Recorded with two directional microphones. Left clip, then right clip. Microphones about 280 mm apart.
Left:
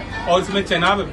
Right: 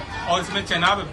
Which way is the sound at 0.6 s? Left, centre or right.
Centre.